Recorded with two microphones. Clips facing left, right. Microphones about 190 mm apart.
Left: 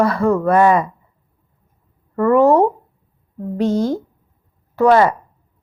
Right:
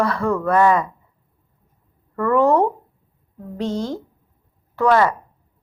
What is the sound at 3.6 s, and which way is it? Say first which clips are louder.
Speech: left 6 dB; 45° left (ahead or behind).